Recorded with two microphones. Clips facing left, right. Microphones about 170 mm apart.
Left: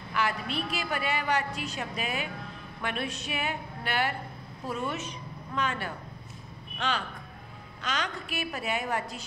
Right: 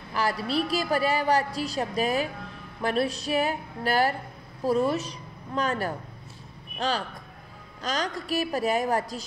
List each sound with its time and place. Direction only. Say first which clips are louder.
0.1 s a woman's voice: right 4 dB; 35° right (ahead or behind)